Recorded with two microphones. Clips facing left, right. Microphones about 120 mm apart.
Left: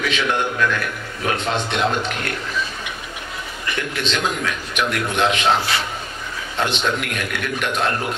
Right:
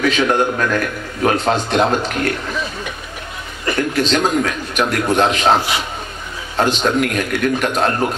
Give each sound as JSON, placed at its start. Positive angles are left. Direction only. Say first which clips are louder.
{"t": 0.0, "sound": "a man's voice", "louder": "right 6 dB", "side_deg": -40}
{"t": 3.6, "sound": "a man's voice", "louder": "right 8 dB", "side_deg": -40}
{"t": 5.6, "sound": "a man's voice", "louder": "right 2 dB", "side_deg": -15}
{"t": 6.6, "sound": "a man's voice", "louder": "right 6 dB", "side_deg": -40}